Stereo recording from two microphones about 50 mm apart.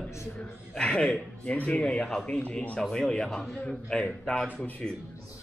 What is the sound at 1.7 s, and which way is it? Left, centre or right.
A man's voice, centre.